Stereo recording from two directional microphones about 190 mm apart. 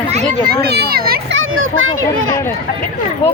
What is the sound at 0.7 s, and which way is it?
Speech, 55° right (ahead or behind).